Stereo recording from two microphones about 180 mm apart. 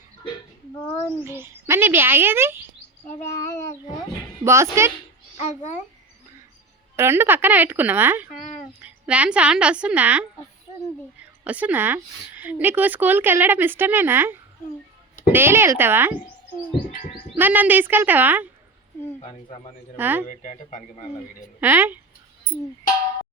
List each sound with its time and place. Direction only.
0.8 s speech: 15° left (ahead or behind)
1.2 s speech: 15° right (ahead or behind)
3.2 s speech: 15° left (ahead or behind)
4.4 s speech: 15° right (ahead or behind)
6.9 s speech: 15° right (ahead or behind)
8.3 s speech: 45° left (ahead or behind)
8.8 s speech: 5° right (ahead or behind)
11.4 s speech: 10° right (ahead or behind)
17.3 s speech: 10° right (ahead or behind)
19.2 s speech: 30° left (ahead or behind)
20.0 s speech: 10° right (ahead or behind)
20.2 s speech: 45° left (ahead or behind)
21.6 s speech: 10° right (ahead or behind)